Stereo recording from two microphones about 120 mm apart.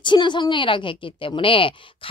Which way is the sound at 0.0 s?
40° left (ahead or behind).